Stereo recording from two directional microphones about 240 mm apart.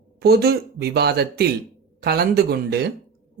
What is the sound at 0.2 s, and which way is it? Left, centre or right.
A woman's voice, right.